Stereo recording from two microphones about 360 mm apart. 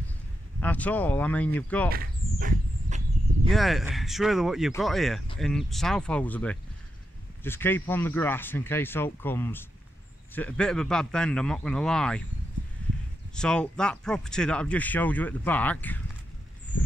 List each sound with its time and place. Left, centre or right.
0.6 s speech: centre
1.9 s speech: right
3.4 s speech: centre
13.3 s speech: centre